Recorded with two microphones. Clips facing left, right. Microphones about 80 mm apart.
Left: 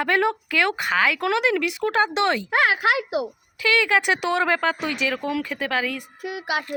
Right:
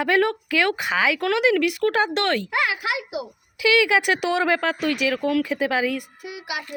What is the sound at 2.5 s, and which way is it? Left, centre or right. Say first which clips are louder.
Speech: left 4 dB; left.